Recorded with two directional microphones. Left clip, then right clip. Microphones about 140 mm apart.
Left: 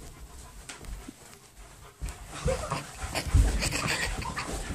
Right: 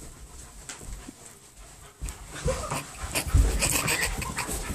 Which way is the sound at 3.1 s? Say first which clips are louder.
Right 2 dB; 15° right (ahead or behind).